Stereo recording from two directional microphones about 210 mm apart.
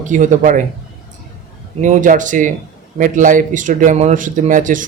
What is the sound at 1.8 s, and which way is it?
Speech, 40° right (ahead or behind).